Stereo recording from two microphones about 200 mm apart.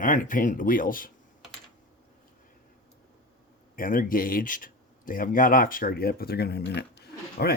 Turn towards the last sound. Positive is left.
turn(degrees=55)  # may be behind; listen again after turning